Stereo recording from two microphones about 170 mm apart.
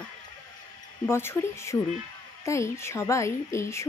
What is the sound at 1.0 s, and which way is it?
Speech, 15° left (ahead or behind).